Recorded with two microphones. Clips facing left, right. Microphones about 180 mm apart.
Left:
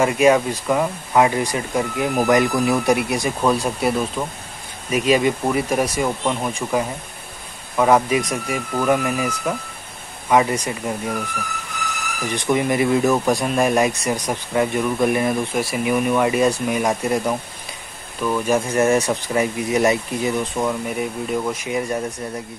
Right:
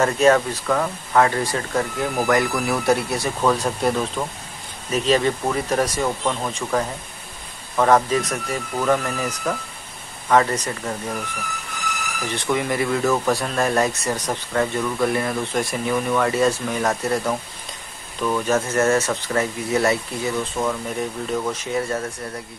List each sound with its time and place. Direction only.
0.0 s speech: 10° left (ahead or behind)
12.3 s speech: 15° left (ahead or behind)
15.5 s speech: 5° left (ahead or behind)